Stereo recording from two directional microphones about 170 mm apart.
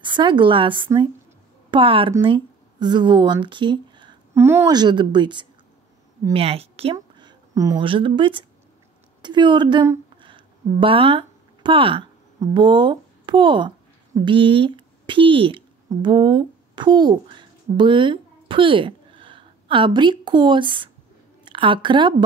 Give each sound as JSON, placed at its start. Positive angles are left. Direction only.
{"t": 0.0, "sound": "a woman's voice", "side_deg": -30}
{"t": 4.3, "sound": "a woman's voice", "side_deg": -15}
{"t": 4.6, "sound": "speech", "side_deg": -25}
{"t": 6.3, "sound": "a sound", "side_deg": -35}
{"t": 7.8, "sound": "a woman's voice", "side_deg": -30}